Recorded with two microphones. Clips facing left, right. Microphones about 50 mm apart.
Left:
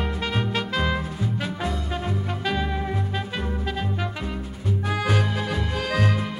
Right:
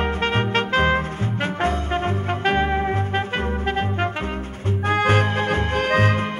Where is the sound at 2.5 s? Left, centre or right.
Right.